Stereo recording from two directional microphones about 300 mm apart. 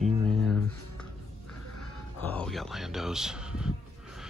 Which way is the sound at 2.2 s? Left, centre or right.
Centre.